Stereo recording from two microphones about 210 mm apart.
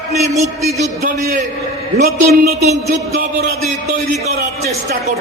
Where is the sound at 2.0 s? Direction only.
45° right (ahead or behind).